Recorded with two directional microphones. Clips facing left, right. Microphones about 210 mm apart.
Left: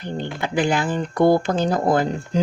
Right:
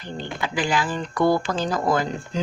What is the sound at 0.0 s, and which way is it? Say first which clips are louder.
Speech: left 3 dB; 55° left (ahead or behind).